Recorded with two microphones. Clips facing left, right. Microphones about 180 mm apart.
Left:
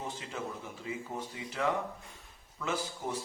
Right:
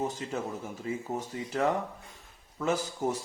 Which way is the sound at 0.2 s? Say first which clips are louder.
Right 5 dB; 45° right (ahead or behind).